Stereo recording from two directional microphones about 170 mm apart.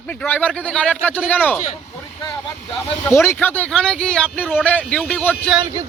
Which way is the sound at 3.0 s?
15° left (ahead or behind).